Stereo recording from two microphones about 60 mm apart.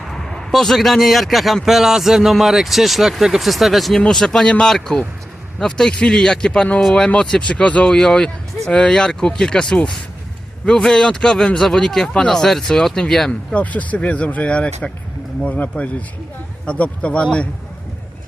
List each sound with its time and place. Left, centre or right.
0.0 s a man's voice: centre
4.0 s a man's voice: centre
13.5 s speech: left